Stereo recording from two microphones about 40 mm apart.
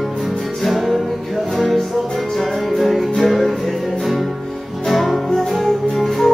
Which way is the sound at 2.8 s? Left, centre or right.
Centre.